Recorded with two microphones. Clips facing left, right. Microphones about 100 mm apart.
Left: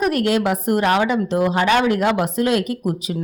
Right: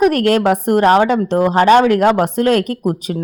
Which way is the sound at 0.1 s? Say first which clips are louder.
Right 5 dB; 50° right (ahead or behind).